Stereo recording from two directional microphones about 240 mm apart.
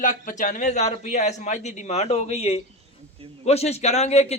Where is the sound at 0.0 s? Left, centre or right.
Left.